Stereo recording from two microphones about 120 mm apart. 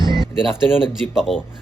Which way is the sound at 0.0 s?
40° right (ahead or behind).